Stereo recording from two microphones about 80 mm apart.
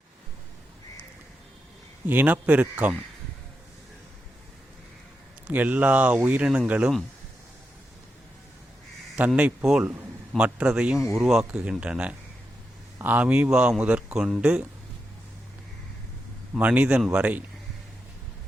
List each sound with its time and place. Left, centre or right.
2.0 s speech: right
5.5 s speech: centre
9.1 s speech: centre
16.6 s speech: centre